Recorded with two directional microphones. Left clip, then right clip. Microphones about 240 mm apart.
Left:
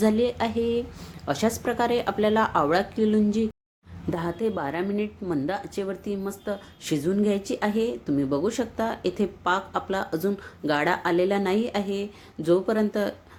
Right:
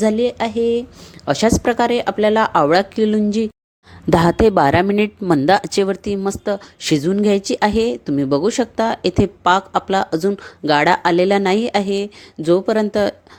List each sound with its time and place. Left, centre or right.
0.0 s a woman's voice: right